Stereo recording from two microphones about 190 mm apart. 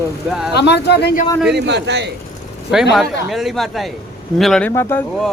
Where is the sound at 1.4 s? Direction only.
60° right (ahead or behind).